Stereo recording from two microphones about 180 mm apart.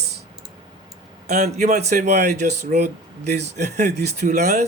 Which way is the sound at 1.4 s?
40° right (ahead or behind).